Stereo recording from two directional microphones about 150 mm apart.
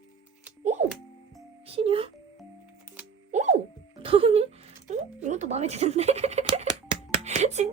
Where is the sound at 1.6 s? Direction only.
40° right (ahead or behind).